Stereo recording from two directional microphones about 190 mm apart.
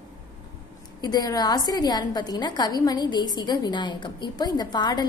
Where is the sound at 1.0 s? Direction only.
20° left (ahead or behind).